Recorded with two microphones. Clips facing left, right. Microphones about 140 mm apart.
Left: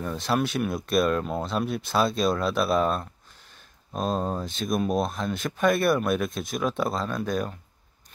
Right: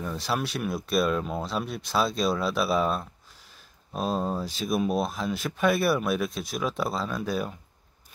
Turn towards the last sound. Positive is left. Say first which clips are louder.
# left 2 dB
turn(degrees=-5)  # may be behind; listen again after turning